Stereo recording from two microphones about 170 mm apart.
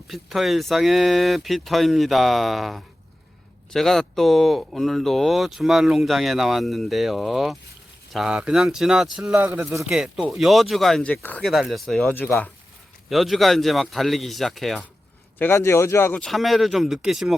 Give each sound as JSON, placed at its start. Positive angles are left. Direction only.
{"t": 0.1, "sound": "speech", "side_deg": 0}
{"t": 9.8, "sound": "speech", "side_deg": -5}
{"t": 15.4, "sound": "speech", "side_deg": 15}
{"t": 16.2, "sound": "speech", "side_deg": 0}